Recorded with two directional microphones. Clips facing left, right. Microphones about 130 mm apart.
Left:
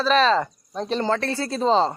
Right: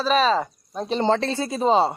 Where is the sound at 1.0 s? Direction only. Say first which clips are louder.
Right 4 dB; 25° right (ahead or behind).